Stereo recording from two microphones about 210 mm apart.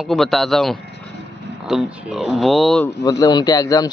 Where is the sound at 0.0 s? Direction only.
Centre (ahead or behind).